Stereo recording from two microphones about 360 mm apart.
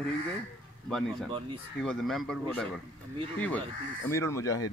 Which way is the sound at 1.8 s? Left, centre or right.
Centre.